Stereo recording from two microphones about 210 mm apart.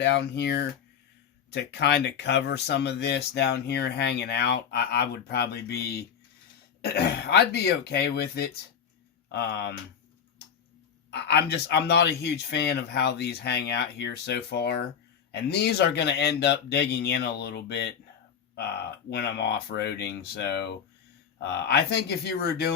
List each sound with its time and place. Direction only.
0.0 s speech: 55° left (ahead or behind)
11.1 s speech: 50° left (ahead or behind)